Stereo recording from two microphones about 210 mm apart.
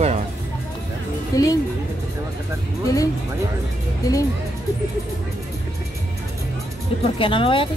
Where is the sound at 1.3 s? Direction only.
15° left (ahead or behind).